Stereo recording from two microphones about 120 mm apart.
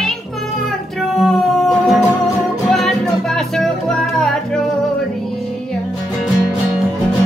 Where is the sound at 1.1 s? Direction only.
Centre (ahead or behind).